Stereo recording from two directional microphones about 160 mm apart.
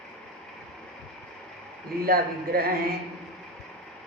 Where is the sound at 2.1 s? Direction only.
70° right (ahead or behind).